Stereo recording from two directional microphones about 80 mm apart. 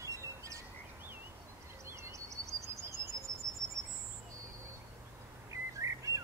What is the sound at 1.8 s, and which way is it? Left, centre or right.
Bird, right.